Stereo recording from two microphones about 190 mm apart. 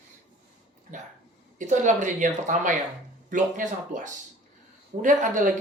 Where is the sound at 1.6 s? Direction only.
40° right (ahead or behind).